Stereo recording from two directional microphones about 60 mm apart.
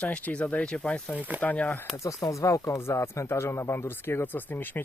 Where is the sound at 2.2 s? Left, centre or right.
Left.